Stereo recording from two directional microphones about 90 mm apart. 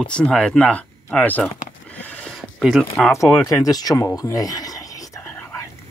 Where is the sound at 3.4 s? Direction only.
40° left (ahead or behind).